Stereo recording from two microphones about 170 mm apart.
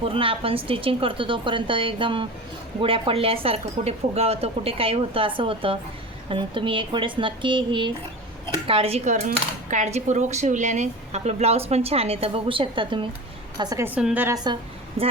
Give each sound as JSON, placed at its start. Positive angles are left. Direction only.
{"t": 0.0, "sound": "a woman's voice", "side_deg": -30}
{"t": 13.6, "sound": "a woman's voice", "side_deg": -20}
{"t": 14.3, "sound": "a woman's voice", "side_deg": -25}